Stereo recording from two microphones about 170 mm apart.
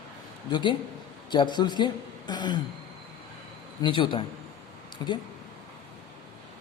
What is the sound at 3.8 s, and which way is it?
A man's voice, 30° left (ahead or behind).